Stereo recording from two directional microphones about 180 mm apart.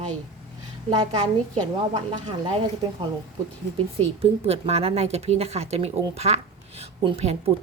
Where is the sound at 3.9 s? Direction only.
35° right (ahead or behind).